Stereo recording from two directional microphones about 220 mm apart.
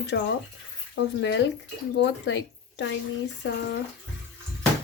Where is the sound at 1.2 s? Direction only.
55° left (ahead or behind).